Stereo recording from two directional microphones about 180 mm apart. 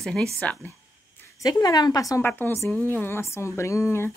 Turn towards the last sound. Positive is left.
turn(degrees=15)  # may be behind; listen again after turning